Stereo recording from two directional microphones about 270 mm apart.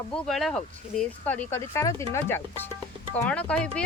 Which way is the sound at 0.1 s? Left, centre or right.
Centre.